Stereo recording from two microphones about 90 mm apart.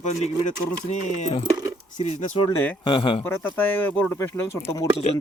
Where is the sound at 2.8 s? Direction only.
70° left (ahead or behind).